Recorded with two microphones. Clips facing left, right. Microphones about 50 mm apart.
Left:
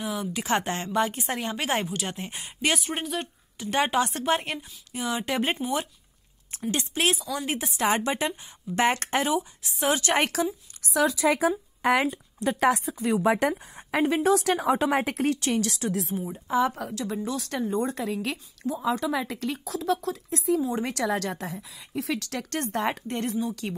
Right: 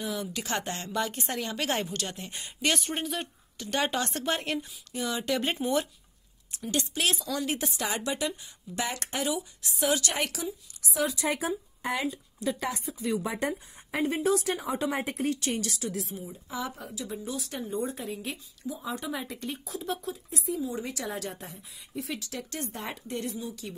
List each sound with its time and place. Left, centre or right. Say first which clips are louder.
0.0 s speech: left 3 dB; centre
2.0 s speech: left 4 dB; left
2.4 s a woman's voice: left 2 dB; centre
3.5 s speech: left 5 dB; centre
5.6 s speech: right 1 dB; centre
6.5 s speech: left 2 dB; left
7.7 s a woman's voice: left 7 dB; left
10.1 s speech: left 7 dB; left
10.9 s a woman's voice: left 6 dB; left
11.8 s speech: left 9 dB; left
16.7 s a woman's voice: left 6 dB; left
20.8 s speech: left 8 dB; left
23.6 s speech: left 7 dB; left